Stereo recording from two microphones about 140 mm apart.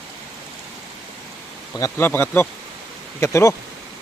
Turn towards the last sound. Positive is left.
turn(degrees=20)  # may be behind; listen again after turning